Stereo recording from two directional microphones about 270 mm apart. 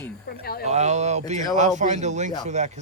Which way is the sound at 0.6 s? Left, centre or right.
Right.